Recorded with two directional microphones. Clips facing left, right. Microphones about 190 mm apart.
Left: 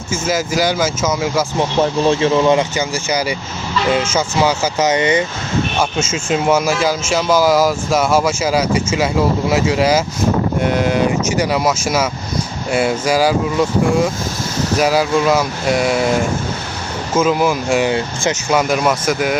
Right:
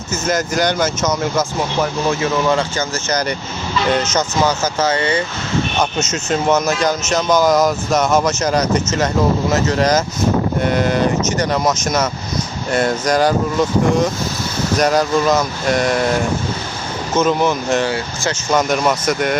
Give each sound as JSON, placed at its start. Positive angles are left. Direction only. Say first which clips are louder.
{"t": 0.1, "sound": "speech", "louder": "left 1 dB", "side_deg": 5}
{"t": 1.5, "sound": "speech", "louder": "left 3 dB", "side_deg": 25}
{"t": 5.8, "sound": "speech", "louder": "left 1 dB", "side_deg": 10}
{"t": 17.2, "sound": "speech", "louder": "left 1 dB", "side_deg": 5}